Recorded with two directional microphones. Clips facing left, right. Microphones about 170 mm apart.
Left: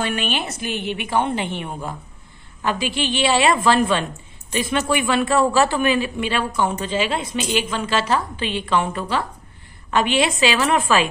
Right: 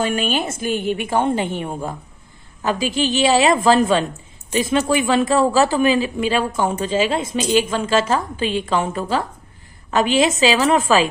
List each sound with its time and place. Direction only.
0.0 s a woman's voice: 45° right (ahead or behind)